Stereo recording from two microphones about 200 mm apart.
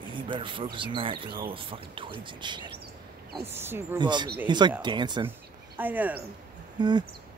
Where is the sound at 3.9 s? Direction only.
20° right (ahead or behind).